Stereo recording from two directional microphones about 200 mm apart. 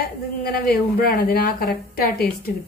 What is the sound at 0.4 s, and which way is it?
A woman's voice, 50° left (ahead or behind).